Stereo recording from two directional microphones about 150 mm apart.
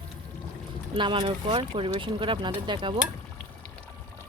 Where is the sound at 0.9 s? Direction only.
35° right (ahead or behind).